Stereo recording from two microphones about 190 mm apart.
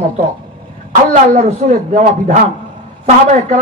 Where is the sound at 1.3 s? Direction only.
40° right (ahead or behind).